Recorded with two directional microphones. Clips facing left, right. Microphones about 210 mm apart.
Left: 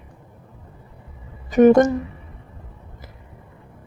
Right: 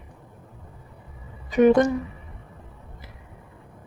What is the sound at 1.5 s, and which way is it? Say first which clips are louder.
Speech: left 4 dB; 45° left (ahead or behind).